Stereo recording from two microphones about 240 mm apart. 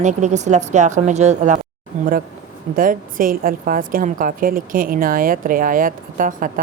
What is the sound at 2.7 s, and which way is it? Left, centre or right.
A woman's voice, right.